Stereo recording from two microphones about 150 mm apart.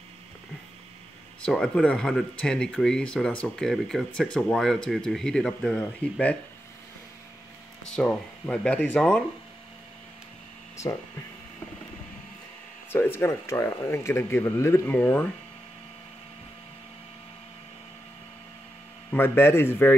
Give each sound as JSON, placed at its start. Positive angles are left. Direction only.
{"t": 1.4, "sound": "speech", "side_deg": 5}
{"t": 7.9, "sound": "speech", "side_deg": 5}
{"t": 12.9, "sound": "speech", "side_deg": 15}
{"t": 19.0, "sound": "speech", "side_deg": 15}